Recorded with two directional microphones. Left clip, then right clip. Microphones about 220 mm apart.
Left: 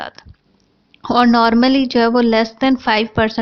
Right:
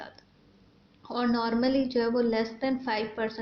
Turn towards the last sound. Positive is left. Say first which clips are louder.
# left 15 dB
turn(degrees=35)  # may be behind; listen again after turning